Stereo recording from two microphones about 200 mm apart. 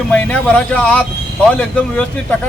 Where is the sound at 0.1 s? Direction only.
10° left (ahead or behind).